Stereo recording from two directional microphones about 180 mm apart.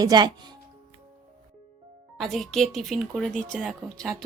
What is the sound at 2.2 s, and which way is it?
Speech, centre (ahead or behind).